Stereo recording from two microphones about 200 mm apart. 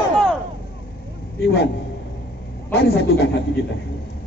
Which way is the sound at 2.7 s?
55° left (ahead or behind).